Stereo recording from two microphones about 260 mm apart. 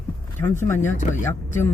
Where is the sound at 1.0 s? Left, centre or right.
Left.